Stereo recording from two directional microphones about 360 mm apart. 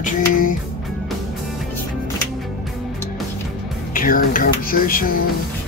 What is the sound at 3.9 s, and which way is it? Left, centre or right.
Speech, left.